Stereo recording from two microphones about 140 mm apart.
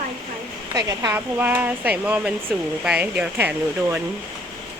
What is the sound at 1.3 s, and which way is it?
Speech, 15° right (ahead or behind).